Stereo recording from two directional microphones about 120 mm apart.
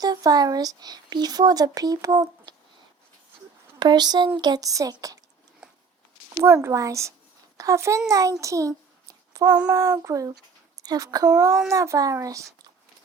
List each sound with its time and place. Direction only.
0.0 s speech: 35° right (ahead or behind)
3.8 s speech: 35° right (ahead or behind)
5.6 s a sound: 5° right (ahead or behind)
6.4 s a child's voice: 25° right (ahead or behind)
9.3 s child singing: 30° right (ahead or behind)
9.6 s a child's voice: 30° right (ahead or behind)